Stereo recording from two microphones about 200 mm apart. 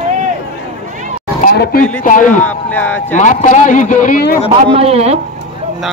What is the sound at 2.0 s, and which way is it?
Speech, 40° left (ahead or behind).